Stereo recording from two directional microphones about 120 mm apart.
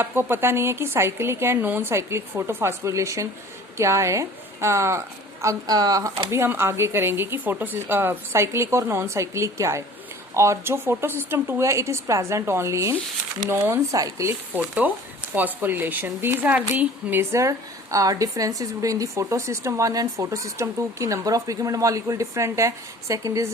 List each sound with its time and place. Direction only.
0.0 s a woman's voice: 20° right (ahead or behind)
6.3 s a woman's voice: 20° right (ahead or behind)
14.6 s a woman's voice: 10° right (ahead or behind)